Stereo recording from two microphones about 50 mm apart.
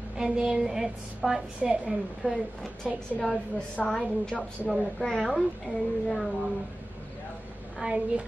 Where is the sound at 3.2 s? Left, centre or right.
Centre.